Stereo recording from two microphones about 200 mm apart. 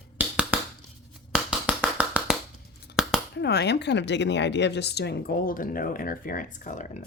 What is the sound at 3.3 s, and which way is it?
A woman's voice, 55° left (ahead or behind).